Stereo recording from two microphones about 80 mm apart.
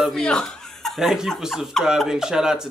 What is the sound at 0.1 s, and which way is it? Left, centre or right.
Chuckle, centre.